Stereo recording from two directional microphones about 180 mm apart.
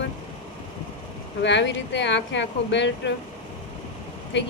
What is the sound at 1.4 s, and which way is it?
Speech, 80° left.